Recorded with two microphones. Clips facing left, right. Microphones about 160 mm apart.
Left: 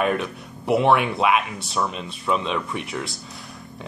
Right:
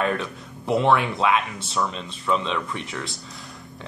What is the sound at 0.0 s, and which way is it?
Speech, 10° left (ahead or behind).